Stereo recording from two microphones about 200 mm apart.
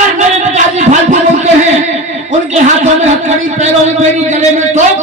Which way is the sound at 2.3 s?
35° right (ahead or behind).